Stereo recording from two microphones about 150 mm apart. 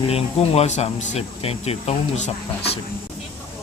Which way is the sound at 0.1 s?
45° left (ahead or behind).